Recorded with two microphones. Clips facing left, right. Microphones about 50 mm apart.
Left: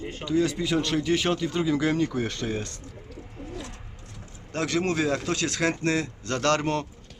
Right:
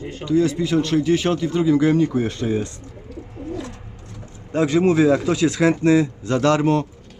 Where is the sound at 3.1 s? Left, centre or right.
Centre.